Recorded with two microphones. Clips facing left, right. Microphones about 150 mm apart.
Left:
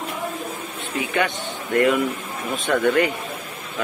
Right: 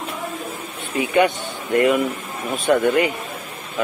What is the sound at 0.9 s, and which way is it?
Speech, 15° right (ahead or behind).